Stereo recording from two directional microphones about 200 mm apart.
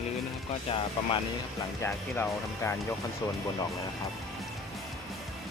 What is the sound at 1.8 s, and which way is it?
Speech, 10° left (ahead or behind).